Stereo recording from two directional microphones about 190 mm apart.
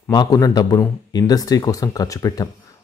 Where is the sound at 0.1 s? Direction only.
20° left (ahead or behind).